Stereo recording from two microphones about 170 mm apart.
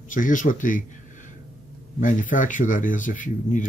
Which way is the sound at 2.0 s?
50° left (ahead or behind).